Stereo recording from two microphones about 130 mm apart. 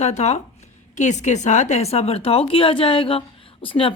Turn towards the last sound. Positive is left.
turn(degrees=45)  # may be behind; listen again after turning